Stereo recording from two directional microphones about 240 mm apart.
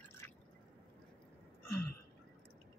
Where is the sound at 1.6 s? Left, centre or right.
Left.